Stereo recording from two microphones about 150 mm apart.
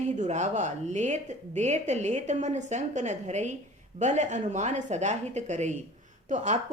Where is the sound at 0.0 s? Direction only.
50° right (ahead or behind).